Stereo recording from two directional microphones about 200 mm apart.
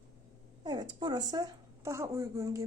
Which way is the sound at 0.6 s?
20° right (ahead or behind).